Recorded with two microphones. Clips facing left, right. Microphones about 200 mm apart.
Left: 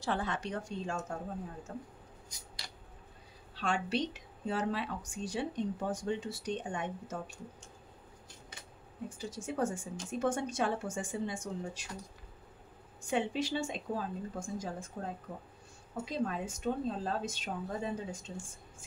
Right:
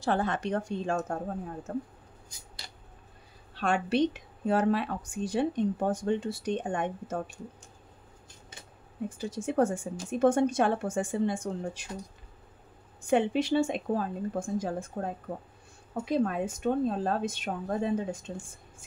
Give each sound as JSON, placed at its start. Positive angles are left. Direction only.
{"t": 0.0, "sound": "a woman's voice", "side_deg": -50}
{"t": 3.5, "sound": "a woman's voice", "side_deg": -55}
{"t": 9.2, "sound": "a woman's voice", "side_deg": -60}
{"t": 13.0, "sound": "a woman's voice", "side_deg": -60}